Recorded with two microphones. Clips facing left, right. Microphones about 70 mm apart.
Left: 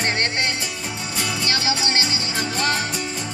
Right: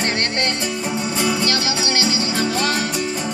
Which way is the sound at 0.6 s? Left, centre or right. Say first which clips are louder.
Right 7 dB; right.